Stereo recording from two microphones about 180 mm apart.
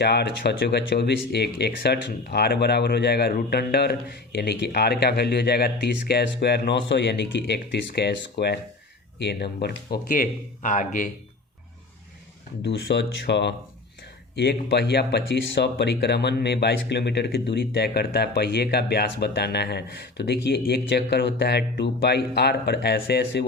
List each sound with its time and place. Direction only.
0.0 s speech: 65° left (ahead or behind); by 11.1 s 45° left (ahead or behind)
12.6 s speech: 70° left (ahead or behind)